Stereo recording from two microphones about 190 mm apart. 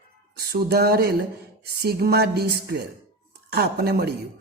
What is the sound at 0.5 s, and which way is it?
A woman's voice, 55° right (ahead or behind).